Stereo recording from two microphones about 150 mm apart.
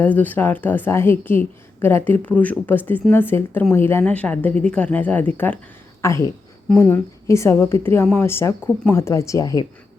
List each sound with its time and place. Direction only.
0.0 s a woman's voice: 10° left (ahead or behind)